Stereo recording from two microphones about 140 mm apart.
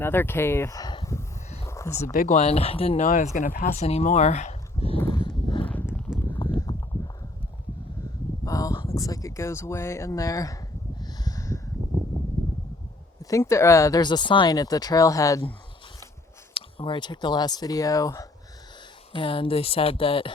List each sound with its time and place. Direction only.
0.0 s speech: 15° left (ahead or behind)
1.6 s a sound: 20° left (ahead or behind)
2.1 s speech: 60° left (ahead or behind); by 3.1 s 45° left (ahead or behind)
3.1 s speech: 65° left (ahead or behind); by 4.9 s 50° left (ahead or behind)
4.9 s a sound: 20° left (ahead or behind)
5.2 s a sound: 35° left (ahead or behind)
6.6 s clip-clop: 20° left (ahead or behind)
8.4 s speech: 25° left (ahead or behind)
11.0 s a sound: 25° left (ahead or behind)
13.3 s speech: 20° left (ahead or behind)
16.6 s speech: 40° left (ahead or behind)
19.1 s speech: 40° left (ahead or behind)